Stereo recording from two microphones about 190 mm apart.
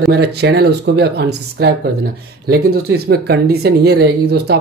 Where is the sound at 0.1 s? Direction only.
60° right (ahead or behind).